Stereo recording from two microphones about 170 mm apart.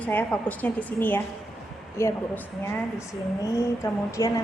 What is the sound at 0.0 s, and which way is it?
A woman's voice, 10° left (ahead or behind).